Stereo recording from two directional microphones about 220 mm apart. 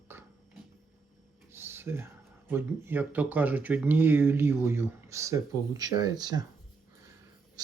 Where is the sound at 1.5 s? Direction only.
10° right (ahead or behind).